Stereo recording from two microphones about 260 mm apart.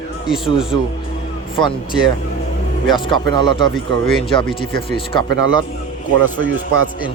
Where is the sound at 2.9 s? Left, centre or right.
Centre.